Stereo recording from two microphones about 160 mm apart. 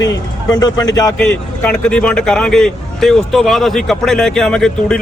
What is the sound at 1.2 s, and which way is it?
Speech, 5° left (ahead or behind).